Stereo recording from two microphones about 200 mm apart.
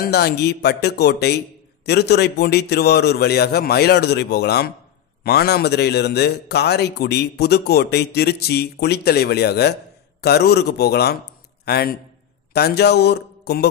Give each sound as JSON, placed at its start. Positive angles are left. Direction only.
{"t": 0.0, "sound": "a man's voice", "side_deg": 55}